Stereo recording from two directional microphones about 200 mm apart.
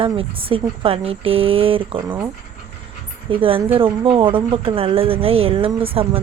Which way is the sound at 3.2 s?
25° right (ahead or behind).